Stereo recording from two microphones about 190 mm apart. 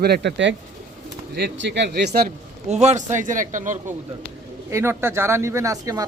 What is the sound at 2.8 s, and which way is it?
Speech, 40° right (ahead or behind).